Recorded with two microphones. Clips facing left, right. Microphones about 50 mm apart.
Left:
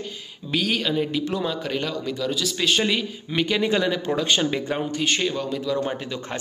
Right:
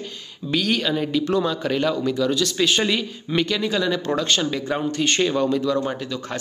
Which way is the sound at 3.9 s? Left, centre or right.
Centre.